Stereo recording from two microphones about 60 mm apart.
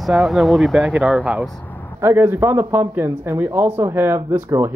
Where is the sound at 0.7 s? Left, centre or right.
Right.